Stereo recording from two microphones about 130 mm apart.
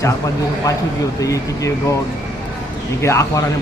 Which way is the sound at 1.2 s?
25° left (ahead or behind).